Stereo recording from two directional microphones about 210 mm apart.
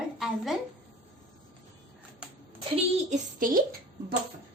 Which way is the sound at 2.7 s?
35° right (ahead or behind).